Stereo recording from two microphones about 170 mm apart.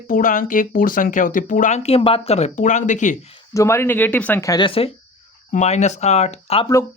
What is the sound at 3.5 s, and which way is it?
Speech, 15° left (ahead or behind).